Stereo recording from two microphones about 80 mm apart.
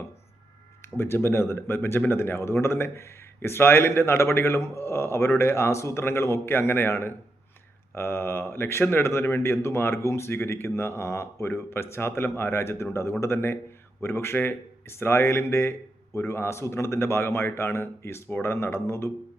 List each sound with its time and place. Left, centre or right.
0.8 s speech: left